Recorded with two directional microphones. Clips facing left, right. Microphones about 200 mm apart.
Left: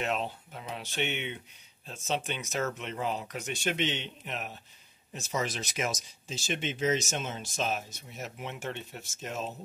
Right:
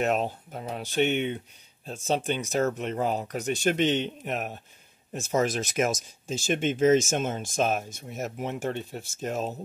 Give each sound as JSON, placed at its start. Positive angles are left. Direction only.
{"t": 0.0, "sound": "speech", "side_deg": -45}